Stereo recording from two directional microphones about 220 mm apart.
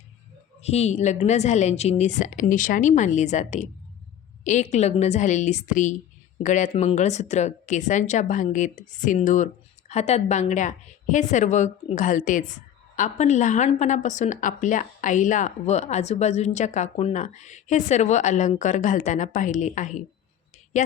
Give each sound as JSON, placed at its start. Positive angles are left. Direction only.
{"t": 0.6, "sound": "speech", "side_deg": 30}